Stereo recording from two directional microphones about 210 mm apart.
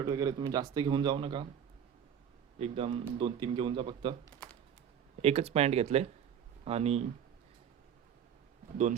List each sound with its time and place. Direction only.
0.0 s a man's voice: 20° right (ahead or behind)
2.6 s a man's voice: 25° right (ahead or behind)
5.2 s a man's voice: 30° right (ahead or behind)